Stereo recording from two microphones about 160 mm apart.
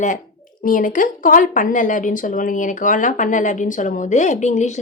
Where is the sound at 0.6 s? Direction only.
55° left (ahead or behind).